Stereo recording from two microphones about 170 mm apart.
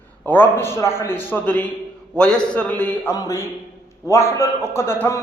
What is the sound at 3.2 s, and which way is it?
A man's voice, 20° left (ahead or behind).